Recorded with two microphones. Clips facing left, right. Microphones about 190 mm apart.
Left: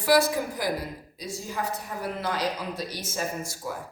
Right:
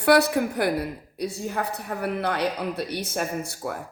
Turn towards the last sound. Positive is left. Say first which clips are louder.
# right 3 dB
turn(degrees=-60)  # may be behind; listen again after turning